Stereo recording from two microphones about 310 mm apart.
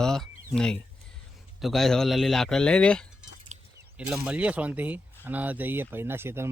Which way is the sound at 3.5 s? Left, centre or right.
Right.